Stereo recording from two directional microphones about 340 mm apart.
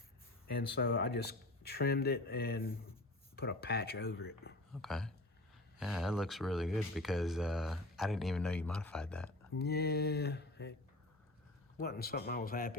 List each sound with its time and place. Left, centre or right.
0.4 s speech: left
4.7 s speech: centre
9.6 s speech: left
11.8 s speech: left